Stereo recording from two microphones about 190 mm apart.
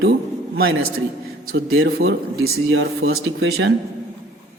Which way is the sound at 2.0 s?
75° right (ahead or behind).